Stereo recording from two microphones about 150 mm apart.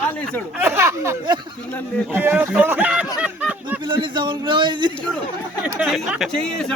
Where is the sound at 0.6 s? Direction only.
15° right (ahead or behind).